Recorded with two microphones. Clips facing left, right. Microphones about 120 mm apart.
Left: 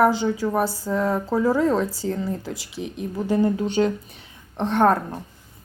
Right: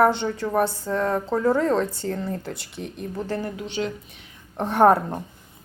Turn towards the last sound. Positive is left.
turn(degrees=-10)  # may be behind; listen again after turning